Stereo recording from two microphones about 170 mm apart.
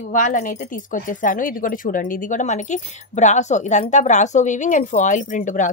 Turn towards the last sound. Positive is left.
turn(degrees=50)  # may be behind; listen again after turning